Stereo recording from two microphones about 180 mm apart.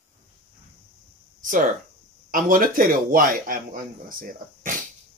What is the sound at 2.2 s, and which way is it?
A man's voice, 50° right (ahead or behind).